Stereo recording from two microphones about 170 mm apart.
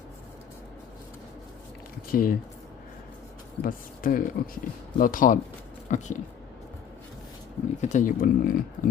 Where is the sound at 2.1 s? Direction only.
60° left (ahead or behind).